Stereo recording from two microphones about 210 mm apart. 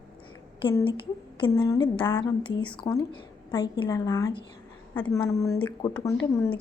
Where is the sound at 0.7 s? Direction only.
15° left (ahead or behind).